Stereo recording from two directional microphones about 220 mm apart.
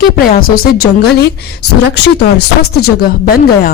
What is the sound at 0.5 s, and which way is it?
Speech, 45° left (ahead or behind).